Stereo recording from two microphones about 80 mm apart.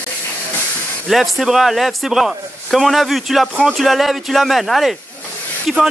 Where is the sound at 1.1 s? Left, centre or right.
Centre.